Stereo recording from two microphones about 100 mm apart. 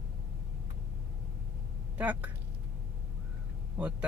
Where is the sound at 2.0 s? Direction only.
15° right (ahead or behind).